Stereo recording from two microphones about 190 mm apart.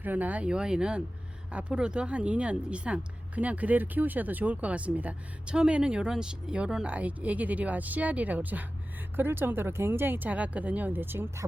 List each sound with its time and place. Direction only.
0.0 s a woman's voice: 10° right (ahead or behind)